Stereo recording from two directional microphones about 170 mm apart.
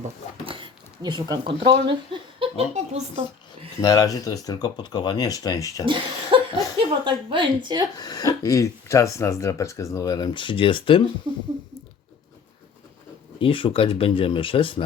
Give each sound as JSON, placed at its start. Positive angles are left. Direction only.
{"t": 0.4, "sound": "speech", "side_deg": -30}
{"t": 3.8, "sound": "speech", "side_deg": 20}
{"t": 5.8, "sound": "a woman's voice", "side_deg": -30}
{"t": 7.9, "sound": "speech", "side_deg": 25}
{"t": 11.3, "sound": "a woman's voice", "side_deg": -25}
{"t": 13.4, "sound": "speech", "side_deg": 30}